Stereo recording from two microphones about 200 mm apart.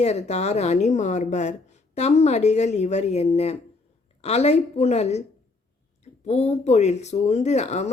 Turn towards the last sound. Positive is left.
turn(degrees=35)  # may be behind; listen again after turning